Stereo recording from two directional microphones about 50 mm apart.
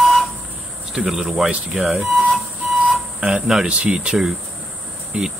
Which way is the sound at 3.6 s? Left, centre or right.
Centre.